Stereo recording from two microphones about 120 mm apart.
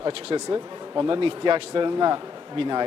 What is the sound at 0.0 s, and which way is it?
Speech, 50° right (ahead or behind).